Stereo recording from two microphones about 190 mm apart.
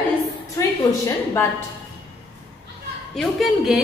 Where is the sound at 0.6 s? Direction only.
15° left (ahead or behind).